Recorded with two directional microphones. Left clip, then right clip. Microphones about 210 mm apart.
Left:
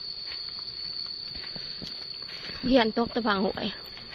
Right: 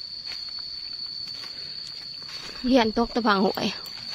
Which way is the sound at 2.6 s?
15° right (ahead or behind).